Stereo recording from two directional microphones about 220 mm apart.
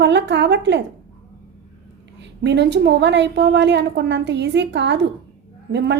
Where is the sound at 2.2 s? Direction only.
50° right (ahead or behind).